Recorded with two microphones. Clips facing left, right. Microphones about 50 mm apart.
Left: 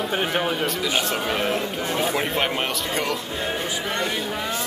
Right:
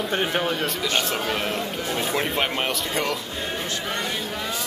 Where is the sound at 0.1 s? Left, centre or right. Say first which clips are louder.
Right 1 dB; centre.